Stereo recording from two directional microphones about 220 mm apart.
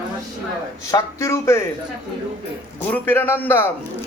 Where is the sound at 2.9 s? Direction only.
10° left (ahead or behind).